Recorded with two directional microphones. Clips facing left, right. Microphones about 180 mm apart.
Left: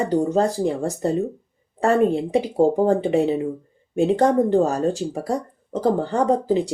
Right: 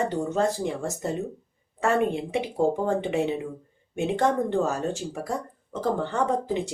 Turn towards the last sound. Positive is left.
turn(degrees=35)  # may be behind; listen again after turning